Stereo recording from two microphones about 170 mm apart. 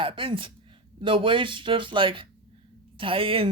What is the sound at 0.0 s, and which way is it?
Speech, 30° right (ahead or behind).